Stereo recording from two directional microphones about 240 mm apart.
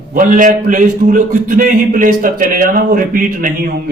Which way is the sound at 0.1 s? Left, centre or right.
Right.